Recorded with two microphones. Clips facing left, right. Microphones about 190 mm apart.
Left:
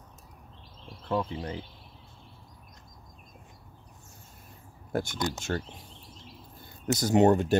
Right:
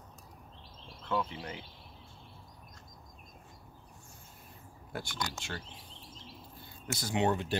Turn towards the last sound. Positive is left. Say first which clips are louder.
# left 9 dB
turn(degrees=45)  # may be behind; listen again after turning